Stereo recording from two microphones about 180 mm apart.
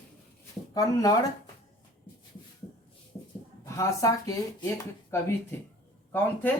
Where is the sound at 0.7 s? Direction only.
20° left (ahead or behind).